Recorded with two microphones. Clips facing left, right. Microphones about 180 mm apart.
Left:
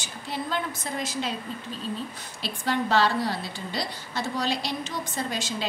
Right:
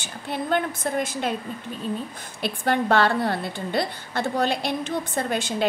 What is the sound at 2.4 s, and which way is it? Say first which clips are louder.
A woman's voice: right 4 dB; 55° right (ahead or behind).